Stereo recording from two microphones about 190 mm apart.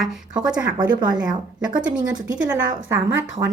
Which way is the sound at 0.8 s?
20° right (ahead or behind).